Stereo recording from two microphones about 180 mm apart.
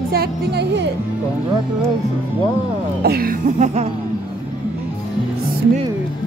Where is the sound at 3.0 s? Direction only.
60° right (ahead or behind); by 3.8 s 40° right (ahead or behind).